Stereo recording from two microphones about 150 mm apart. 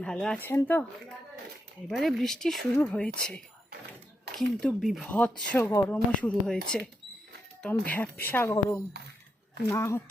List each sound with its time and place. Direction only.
0.0 s speech: 5° left (ahead or behind)
1.9 s speech: centre (ahead or behind); by 10.0 s 20° left (ahead or behind)